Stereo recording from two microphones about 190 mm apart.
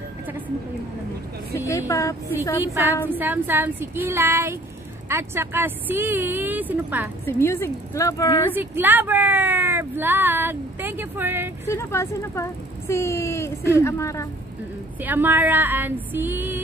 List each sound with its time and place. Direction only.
1.7 s a woman's voice: 15° left (ahead or behind)
2.6 s speech: 10° right (ahead or behind)
7.2 s speech: 10° left (ahead or behind)
8.5 s speech: 10° right (ahead or behind)
11.6 s speech: 15° left (ahead or behind)
15.0 s speech: 10° right (ahead or behind)